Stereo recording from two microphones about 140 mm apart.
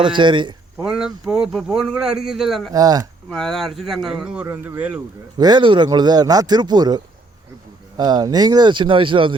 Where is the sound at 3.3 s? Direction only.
5° left (ahead or behind).